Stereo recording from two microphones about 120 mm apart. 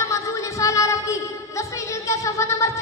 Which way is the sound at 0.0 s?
25° left (ahead or behind).